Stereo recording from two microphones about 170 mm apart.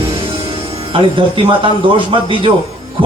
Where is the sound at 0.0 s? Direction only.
30° right (ahead or behind).